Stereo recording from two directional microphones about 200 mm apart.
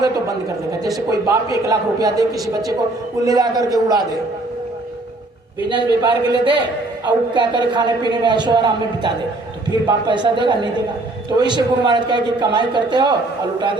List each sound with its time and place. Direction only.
0.9 s a man's voice: 15° right (ahead or behind)
3.2 s a man's voice: 20° right (ahead or behind)
5.7 s a man's voice: 25° right (ahead or behind)